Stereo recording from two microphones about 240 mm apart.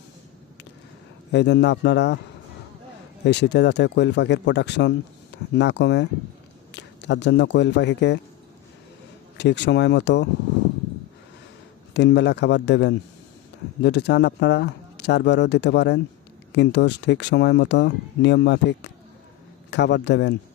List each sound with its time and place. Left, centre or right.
1.3 s speech: left
3.2 s speech: left
9.4 s speech: left
11.9 s speech: left